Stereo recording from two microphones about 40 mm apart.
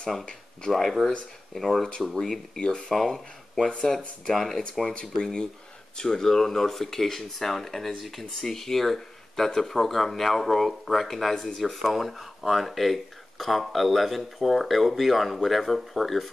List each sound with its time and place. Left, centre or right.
0.7 s speech: centre
2.6 s speech: centre
4.9 s speech: left; by 16.3 s centre